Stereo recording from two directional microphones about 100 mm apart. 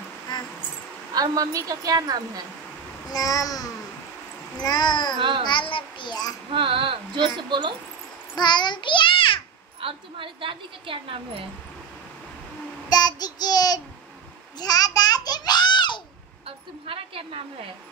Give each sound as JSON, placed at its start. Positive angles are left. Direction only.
{"t": 0.3, "sound": "a sound", "side_deg": 50}
{"t": 1.1, "sound": "a woman's voice", "side_deg": -40}
{"t": 3.1, "sound": "babbling", "side_deg": 35}
{"t": 4.6, "sound": "a child's voice", "side_deg": 45}
{"t": 6.5, "sound": "a woman's voice", "side_deg": -60}
{"t": 8.4, "sound": "a child's voice", "side_deg": 45}
{"t": 9.8, "sound": "a woman's voice", "side_deg": -65}
{"t": 12.9, "sound": "child singing", "side_deg": 40}
{"t": 14.6, "sound": "a sound", "side_deg": 40}
{"t": 16.4, "sound": "a woman's voice", "side_deg": -70}